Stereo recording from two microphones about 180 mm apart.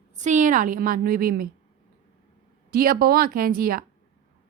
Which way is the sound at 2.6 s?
55° right (ahead or behind).